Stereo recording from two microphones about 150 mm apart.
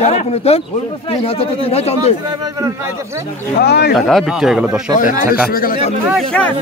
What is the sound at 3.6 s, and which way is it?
Speech, 90° left.